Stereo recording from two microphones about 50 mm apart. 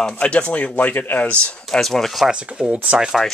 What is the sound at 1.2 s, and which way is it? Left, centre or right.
Speech, left.